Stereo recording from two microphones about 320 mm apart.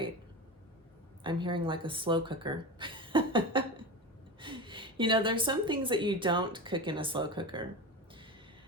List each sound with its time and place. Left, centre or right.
1.2 s a woman's voice: centre